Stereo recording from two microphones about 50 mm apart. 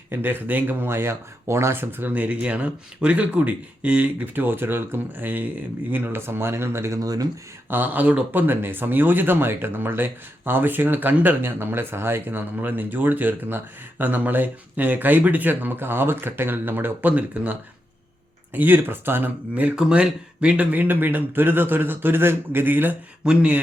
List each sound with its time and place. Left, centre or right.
0.1 s a man's voice: right
0.8 s speech: right
1.7 s speech: right
4.4 s speech: right
7.7 s a man's voice: right
11.4 s a man's voice: right
17.1 s speech: right
18.5 s speech: right
19.5 s a man's voice: right
23.2 s speech: centre